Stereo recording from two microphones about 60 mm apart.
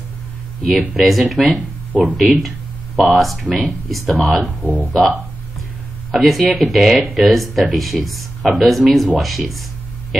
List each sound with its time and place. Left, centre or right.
0.6 s speech: centre
1.9 s speech: right
2.1 s speech: centre
4.6 s speech: right
6.1 s speech: centre